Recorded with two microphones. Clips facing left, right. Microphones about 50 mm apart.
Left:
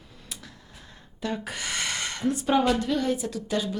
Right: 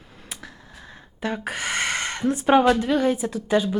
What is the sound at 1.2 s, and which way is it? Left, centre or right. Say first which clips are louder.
A woman's voice: right 4 dB; right.